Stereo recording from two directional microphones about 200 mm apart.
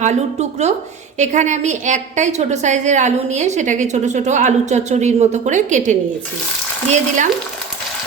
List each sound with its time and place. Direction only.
0.0 s a woman's voice: 35° right (ahead or behind)